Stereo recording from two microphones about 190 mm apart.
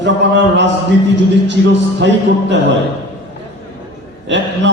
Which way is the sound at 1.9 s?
70° right (ahead or behind).